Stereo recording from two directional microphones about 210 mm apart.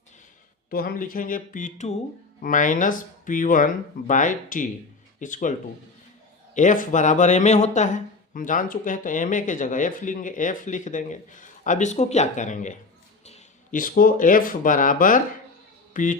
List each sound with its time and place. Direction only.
0.7 s speech: 45° left (ahead or behind)